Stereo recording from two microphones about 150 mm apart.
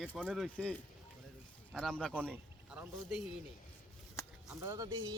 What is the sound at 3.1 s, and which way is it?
Speech, centre (ahead or behind).